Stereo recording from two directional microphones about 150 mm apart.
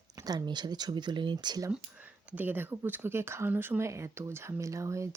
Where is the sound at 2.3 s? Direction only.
15° right (ahead or behind).